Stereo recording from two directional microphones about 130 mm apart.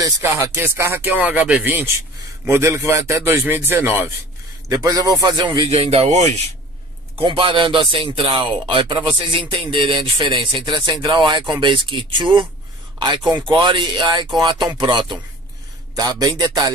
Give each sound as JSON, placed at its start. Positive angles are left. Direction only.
{"t": 0.0, "sound": "speech", "side_deg": -20}
{"t": 4.6, "sound": "speech", "side_deg": -30}
{"t": 5.7, "sound": "speech", "side_deg": -55}
{"t": 7.2, "sound": "speech", "side_deg": -40}